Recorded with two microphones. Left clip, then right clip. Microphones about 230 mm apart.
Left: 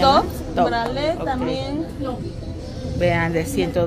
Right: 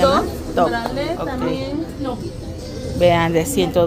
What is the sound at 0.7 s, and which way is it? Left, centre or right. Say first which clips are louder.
Speech: left 1 dB; left.